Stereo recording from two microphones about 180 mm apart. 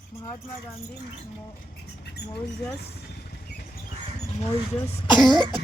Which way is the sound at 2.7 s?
65° left (ahead or behind).